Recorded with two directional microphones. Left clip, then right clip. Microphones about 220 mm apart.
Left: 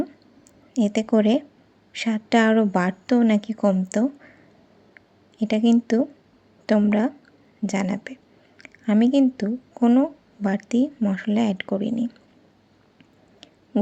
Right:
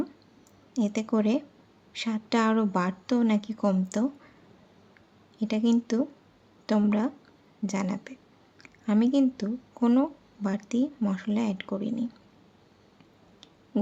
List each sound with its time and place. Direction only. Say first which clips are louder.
0.7 s a woman's voice: left 7 dB; 20° left (ahead or behind)
4.9 s a sound: left 6 dB; 20° left (ahead or behind)
6.7 s a woman's voice: left 6 dB; 15° left (ahead or behind)